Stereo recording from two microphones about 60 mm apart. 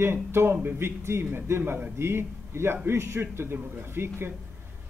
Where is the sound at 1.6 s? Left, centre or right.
Right.